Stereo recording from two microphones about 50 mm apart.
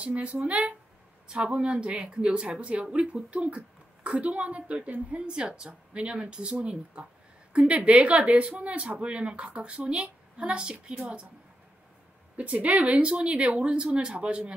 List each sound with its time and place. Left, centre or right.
0.0 s speech: right
12.4 s speech: right